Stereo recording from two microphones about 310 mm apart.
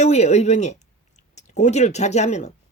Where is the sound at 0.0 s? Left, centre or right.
Left.